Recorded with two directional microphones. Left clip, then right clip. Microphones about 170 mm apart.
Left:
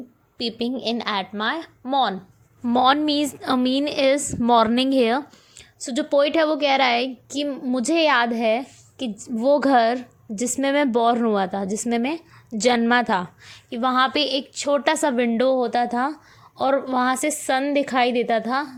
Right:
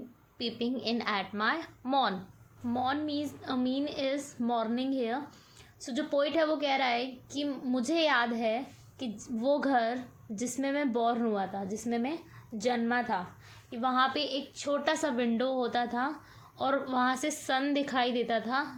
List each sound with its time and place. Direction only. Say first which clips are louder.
0.3 s speech: left 8 dB; 45° left (ahead or behind)
2.6 s a woman's voice: left 14 dB; 55° left (ahead or behind)